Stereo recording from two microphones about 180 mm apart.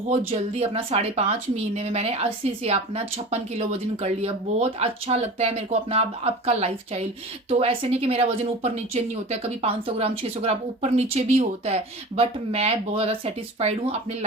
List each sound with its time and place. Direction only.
0.3 s speech: 35° right (ahead or behind)